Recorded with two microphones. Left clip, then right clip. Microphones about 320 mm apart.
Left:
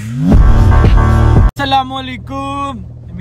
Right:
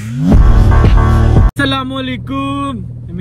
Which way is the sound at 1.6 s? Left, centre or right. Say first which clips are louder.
Left 4 dB; left.